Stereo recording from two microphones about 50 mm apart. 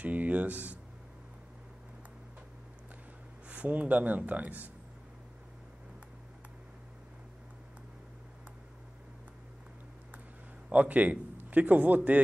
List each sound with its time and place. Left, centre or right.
0.0 s speech: right
3.4 s speech: right
10.7 s a man's voice: right